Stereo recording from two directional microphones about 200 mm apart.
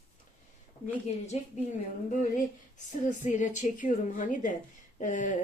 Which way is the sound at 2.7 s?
40° left (ahead or behind).